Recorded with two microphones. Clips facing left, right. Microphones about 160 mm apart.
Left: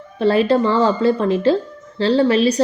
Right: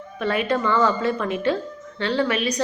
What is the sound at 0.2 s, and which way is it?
Speech, 30° left (ahead or behind).